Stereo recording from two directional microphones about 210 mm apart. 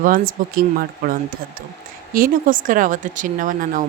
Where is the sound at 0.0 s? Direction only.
40° right (ahead or behind).